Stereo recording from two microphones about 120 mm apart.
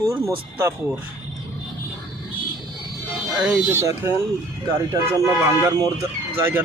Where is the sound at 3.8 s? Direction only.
20° right (ahead or behind).